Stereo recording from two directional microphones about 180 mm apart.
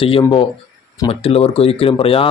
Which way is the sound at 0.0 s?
30° left (ahead or behind).